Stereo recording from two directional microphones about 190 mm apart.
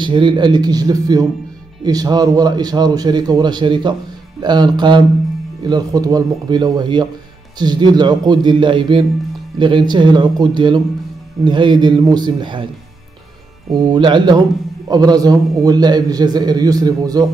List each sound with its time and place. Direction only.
0.0 s a man's voice: 25° right (ahead or behind)
13.8 s a man's voice: 25° right (ahead or behind)